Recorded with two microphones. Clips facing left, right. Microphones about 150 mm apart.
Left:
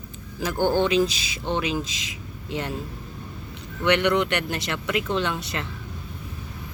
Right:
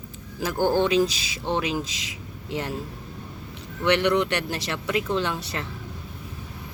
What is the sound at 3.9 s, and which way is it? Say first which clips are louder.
Speech: even; 35° right (ahead or behind).